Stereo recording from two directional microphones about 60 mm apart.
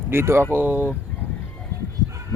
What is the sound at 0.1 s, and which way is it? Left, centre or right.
Speech, right.